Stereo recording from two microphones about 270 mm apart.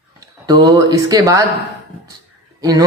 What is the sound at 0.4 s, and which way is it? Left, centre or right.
Speech, centre.